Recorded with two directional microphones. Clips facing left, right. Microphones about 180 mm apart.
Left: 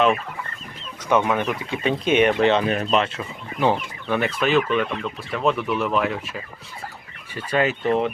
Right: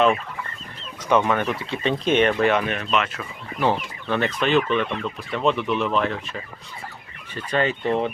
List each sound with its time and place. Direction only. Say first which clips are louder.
1.1 s speech: even; 10° left (ahead or behind)
2.4 s speech: left 2 dB; 20° left (ahead or behind)
2.6 s speech: left 3 dB; 35° left (ahead or behind)
3.6 s speech: left 1 dB; 15° left (ahead or behind)